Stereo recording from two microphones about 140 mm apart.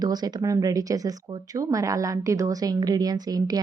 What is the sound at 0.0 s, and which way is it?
Speech, 30° right (ahead or behind).